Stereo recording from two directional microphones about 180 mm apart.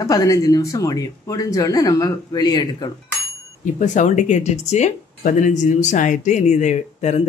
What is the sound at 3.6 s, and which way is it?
Speech, 45° left (ahead or behind).